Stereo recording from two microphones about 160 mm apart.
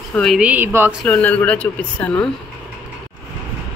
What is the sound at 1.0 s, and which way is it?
Speech, 10° left (ahead or behind).